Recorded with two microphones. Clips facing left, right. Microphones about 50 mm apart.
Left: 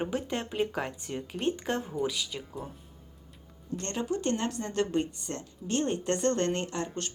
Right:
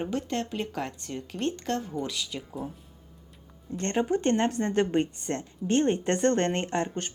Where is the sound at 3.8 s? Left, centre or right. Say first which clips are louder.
Right 6 dB; right.